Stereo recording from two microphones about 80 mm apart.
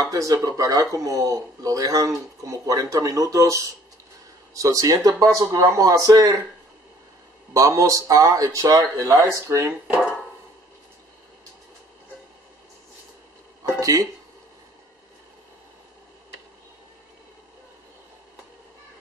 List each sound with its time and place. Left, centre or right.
0.0 s speech: right
7.5 s speech: right
13.7 s a sound: right